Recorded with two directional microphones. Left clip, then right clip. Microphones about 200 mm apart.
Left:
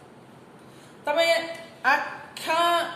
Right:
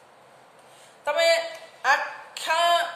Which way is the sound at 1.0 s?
5° right (ahead or behind).